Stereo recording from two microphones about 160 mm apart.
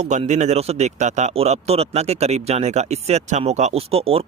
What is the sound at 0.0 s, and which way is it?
Speech, 45° right (ahead or behind).